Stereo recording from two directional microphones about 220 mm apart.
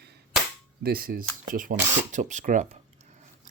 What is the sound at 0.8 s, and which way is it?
Speech, 40° right (ahead or behind).